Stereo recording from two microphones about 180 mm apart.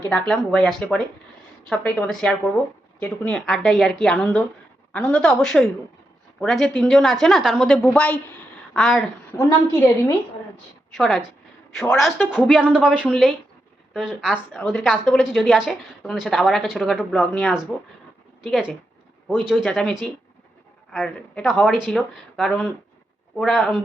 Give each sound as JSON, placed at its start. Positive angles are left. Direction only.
{"t": 0.1, "sound": "a woman's voice", "side_deg": 5}
{"t": 9.4, "sound": "a woman's voice", "side_deg": 15}
{"t": 10.9, "sound": "a woman's voice", "side_deg": 0}